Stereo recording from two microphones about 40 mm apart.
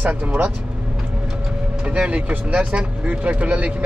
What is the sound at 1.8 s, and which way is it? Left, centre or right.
A man's voice, right.